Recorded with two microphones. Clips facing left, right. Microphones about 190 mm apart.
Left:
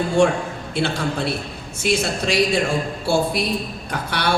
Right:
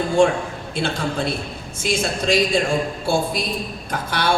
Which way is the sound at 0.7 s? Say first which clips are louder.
Left 1 dB; 65° left (ahead or behind).